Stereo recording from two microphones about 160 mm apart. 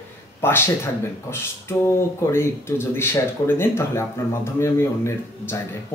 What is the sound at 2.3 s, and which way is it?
Speech, 15° left (ahead or behind).